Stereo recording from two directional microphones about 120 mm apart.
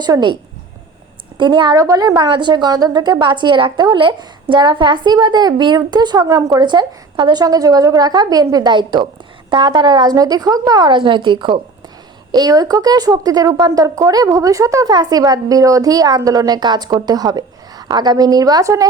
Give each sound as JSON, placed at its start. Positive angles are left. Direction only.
{"t": 0.0, "sound": "a woman's voice", "side_deg": -40}
{"t": 1.4, "sound": "a woman's voice", "side_deg": -40}